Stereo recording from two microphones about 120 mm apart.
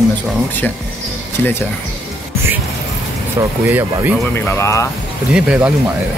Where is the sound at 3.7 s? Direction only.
15° right (ahead or behind).